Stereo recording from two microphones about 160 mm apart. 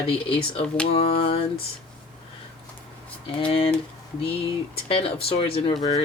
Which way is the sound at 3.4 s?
35° left (ahead or behind).